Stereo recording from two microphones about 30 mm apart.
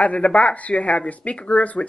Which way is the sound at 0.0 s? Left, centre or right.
Left.